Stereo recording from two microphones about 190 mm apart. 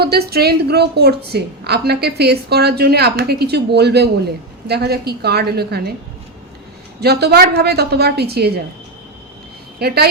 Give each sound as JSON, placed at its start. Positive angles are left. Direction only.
{"t": 0.0, "sound": "a woman's voice", "side_deg": -55}
{"t": 7.0, "sound": "a woman's voice", "side_deg": -60}
{"t": 9.7, "sound": "a woman's voice", "side_deg": -55}